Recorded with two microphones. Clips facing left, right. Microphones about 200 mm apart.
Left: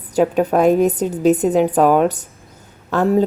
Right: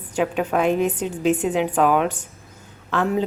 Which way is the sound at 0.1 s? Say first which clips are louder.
Left 6 dB; 40° left (ahead or behind).